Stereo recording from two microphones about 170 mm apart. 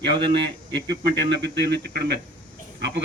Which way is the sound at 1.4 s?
80° right.